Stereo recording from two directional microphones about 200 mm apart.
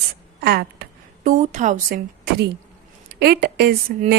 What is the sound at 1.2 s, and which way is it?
Speech, 40° right (ahead or behind).